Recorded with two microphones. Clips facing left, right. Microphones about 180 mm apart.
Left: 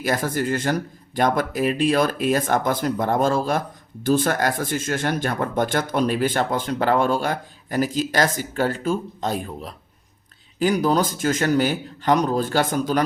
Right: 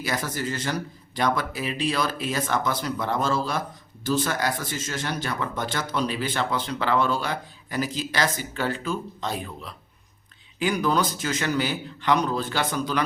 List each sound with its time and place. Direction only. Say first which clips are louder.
0.0 s speech: left 6 dB; 50° left (ahead or behind)